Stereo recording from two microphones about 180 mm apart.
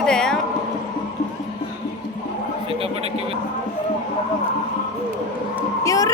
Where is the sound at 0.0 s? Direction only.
5° left (ahead or behind).